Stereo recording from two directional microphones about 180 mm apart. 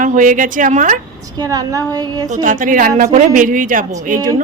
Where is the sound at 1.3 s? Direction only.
20° right (ahead or behind).